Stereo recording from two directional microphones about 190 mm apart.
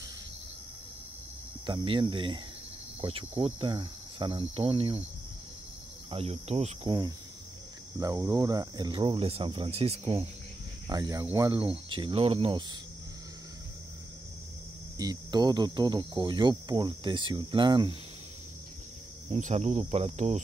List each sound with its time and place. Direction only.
1.7 s speech: 25° right (ahead or behind)
6.0 s cricket: 30° right (ahead or behind)
8.0 s speech: 20° right (ahead or behind)
10.9 s speech: 20° right (ahead or behind)
15.0 s speech: 20° right (ahead or behind)
19.3 s cricket: 35° right (ahead or behind)